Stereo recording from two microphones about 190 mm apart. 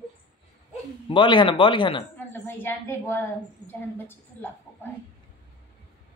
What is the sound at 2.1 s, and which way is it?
A woman's voice, 10° left (ahead or behind).